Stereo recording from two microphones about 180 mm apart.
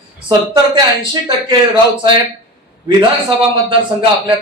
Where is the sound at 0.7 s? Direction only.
25° right (ahead or behind).